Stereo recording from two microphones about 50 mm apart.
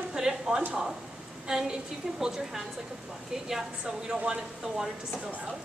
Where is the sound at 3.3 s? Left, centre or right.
Centre.